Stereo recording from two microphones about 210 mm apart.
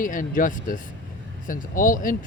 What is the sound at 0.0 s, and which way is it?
Speech, 40° left (ahead or behind).